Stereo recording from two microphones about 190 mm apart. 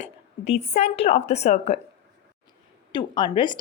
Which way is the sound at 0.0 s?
35° left (ahead or behind).